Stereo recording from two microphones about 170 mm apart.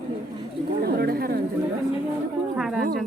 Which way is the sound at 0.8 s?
65° right (ahead or behind).